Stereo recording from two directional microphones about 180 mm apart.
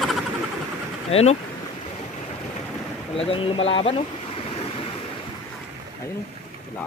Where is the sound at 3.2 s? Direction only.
30° left (ahead or behind).